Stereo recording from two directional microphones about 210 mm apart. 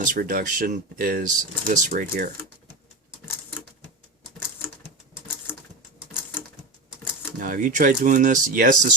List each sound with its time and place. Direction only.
0.0 s speech: 40° right (ahead or behind)
7.4 s speech: 40° right (ahead or behind)